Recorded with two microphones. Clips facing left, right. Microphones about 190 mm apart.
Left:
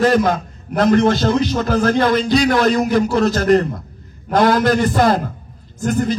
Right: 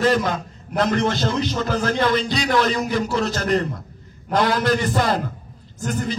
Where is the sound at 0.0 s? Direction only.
50° left (ahead or behind).